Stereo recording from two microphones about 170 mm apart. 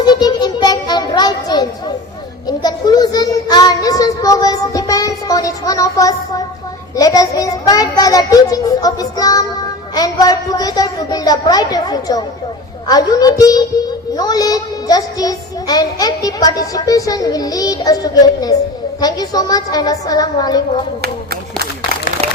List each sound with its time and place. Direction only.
0.0 s music: 25° left (ahead or behind)
2.5 s child singing: 25° left (ahead or behind)
9.9 s a sound: 20° left (ahead or behind)
12.9 s a woman's voice: 20° left (ahead or behind)
14.2 s child singing: 20° left (ahead or behind)
18.9 s a woman's voice: 20° left (ahead or behind)